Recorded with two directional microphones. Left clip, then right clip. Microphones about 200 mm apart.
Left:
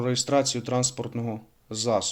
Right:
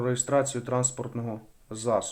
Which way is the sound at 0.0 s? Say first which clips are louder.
Left 2 dB; 35° left (ahead or behind).